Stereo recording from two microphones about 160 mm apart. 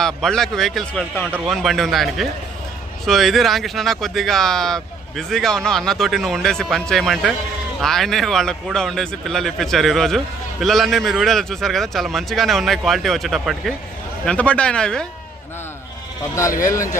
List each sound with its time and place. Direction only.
0.0 s speech: 5° left (ahead or behind)
16.6 s speech: 20° left (ahead or behind)